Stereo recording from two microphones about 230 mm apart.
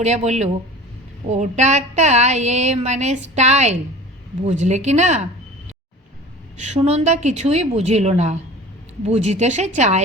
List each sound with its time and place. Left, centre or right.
0.0 s a woman's voice: right